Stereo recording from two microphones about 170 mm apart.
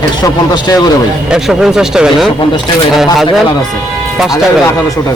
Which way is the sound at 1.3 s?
5° right (ahead or behind).